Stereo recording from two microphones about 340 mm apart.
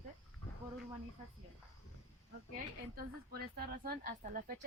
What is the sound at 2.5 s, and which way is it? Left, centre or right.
Speech, right.